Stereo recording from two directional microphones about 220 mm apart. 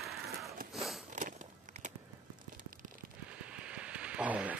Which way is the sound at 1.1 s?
35° right (ahead or behind).